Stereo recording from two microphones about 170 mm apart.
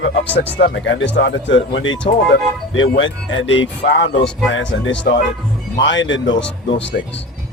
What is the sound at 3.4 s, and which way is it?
Speech, 90° left.